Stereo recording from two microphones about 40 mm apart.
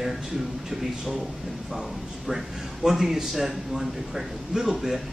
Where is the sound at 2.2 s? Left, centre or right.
Centre.